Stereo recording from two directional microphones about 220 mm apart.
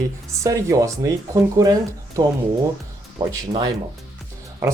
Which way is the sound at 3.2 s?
15° right (ahead or behind).